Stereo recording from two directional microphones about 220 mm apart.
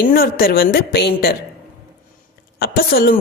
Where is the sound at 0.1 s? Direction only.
40° left (ahead or behind).